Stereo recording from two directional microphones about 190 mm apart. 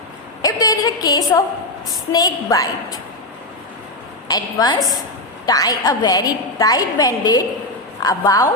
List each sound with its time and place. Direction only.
0.4 s a sound: 20° left (ahead or behind)
1.9 s a woman's voice: 20° left (ahead or behind)
4.3 s a woman's voice: 20° left (ahead or behind)